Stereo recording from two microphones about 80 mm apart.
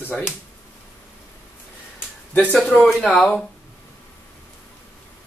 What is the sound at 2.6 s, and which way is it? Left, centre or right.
Speech, centre.